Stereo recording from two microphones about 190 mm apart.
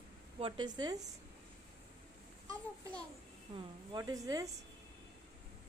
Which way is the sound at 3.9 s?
20° right (ahead or behind).